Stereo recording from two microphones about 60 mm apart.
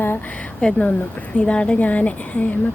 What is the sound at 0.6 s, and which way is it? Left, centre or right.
A woman's voice, centre.